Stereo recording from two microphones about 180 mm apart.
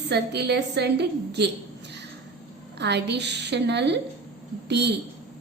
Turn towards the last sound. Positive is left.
turn(degrees=-70)  # may be behind; listen again after turning